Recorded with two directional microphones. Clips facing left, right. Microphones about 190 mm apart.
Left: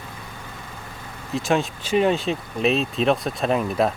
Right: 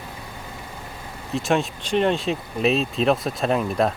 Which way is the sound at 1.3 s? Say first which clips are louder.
Even; centre (ahead or behind).